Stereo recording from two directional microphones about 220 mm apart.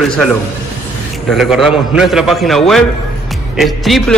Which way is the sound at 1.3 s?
Centre (ahead or behind).